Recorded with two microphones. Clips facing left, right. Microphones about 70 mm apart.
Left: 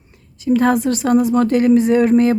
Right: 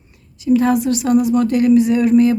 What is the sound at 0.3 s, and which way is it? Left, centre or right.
A woman's voice, left.